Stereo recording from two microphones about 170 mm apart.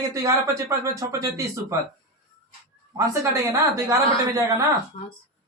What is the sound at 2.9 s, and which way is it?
A woman's voice, 15° right (ahead or behind).